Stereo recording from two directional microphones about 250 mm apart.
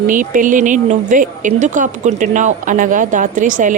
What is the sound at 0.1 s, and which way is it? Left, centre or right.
Speech, right.